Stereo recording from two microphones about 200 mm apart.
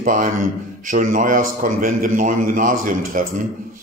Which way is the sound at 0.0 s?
40° right (ahead or behind).